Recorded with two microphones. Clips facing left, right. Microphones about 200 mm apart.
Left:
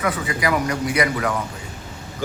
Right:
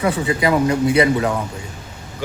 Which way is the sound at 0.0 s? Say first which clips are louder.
Right 5 dB; 25° right (ahead or behind).